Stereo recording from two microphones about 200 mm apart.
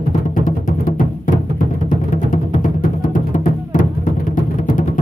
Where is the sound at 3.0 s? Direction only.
40° left (ahead or behind).